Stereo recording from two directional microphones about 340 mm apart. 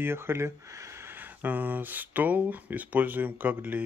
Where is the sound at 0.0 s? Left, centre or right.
Centre.